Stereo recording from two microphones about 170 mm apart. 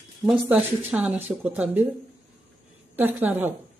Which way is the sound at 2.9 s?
10° right (ahead or behind).